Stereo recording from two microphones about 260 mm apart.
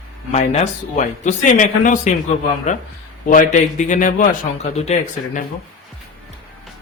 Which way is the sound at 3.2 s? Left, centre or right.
Left.